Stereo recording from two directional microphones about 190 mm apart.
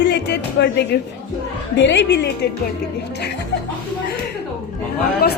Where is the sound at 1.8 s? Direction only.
70° left (ahead or behind).